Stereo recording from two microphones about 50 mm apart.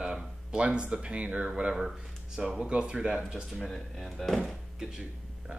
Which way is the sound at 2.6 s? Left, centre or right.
Centre.